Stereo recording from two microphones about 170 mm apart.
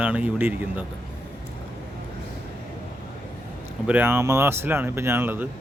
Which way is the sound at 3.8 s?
10° right (ahead or behind).